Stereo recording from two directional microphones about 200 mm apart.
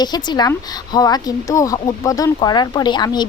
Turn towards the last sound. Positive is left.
turn(degrees=20)  # may be behind; listen again after turning